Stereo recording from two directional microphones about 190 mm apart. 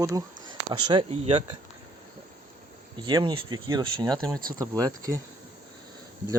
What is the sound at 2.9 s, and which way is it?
Speech, 25° right (ahead or behind).